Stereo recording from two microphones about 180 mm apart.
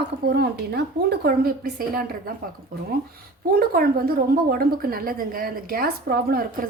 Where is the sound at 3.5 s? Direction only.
55° right (ahead or behind).